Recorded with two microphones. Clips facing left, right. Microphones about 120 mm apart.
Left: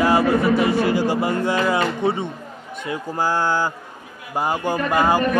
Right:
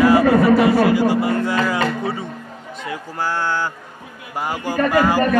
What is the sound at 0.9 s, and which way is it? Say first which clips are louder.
Speech: right 3 dB; 25° left (ahead or behind).